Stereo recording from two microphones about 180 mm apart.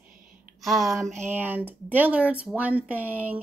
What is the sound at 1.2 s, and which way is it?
Speech, 10° right (ahead or behind).